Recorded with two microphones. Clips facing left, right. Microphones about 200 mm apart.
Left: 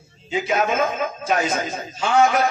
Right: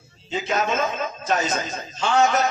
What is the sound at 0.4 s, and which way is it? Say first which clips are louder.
Speech: left 2 dB; 10° left (ahead or behind).